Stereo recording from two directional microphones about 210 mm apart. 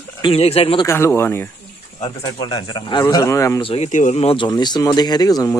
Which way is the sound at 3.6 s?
30° left (ahead or behind).